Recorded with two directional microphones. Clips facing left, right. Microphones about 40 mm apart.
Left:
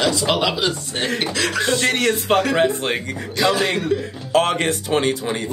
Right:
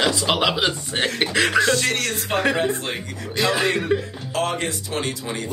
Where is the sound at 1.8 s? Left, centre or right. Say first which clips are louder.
Left 4 dB; left.